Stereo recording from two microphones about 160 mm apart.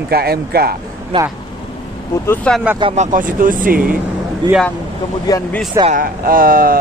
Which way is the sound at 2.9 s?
55° right (ahead or behind).